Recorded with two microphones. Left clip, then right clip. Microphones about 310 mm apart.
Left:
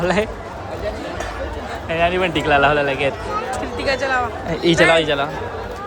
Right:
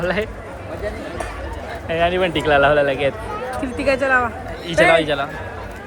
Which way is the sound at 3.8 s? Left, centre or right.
Right.